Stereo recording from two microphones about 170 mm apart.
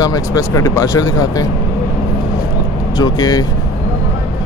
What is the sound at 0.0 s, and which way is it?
Speech, 20° left (ahead or behind).